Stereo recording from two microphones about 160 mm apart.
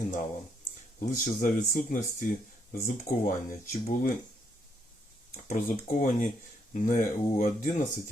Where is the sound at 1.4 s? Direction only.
55° left (ahead or behind).